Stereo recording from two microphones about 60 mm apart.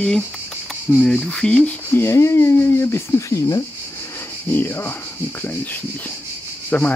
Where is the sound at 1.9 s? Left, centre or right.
Left.